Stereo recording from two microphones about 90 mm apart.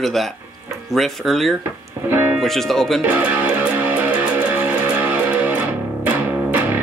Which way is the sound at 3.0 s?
15° right (ahead or behind).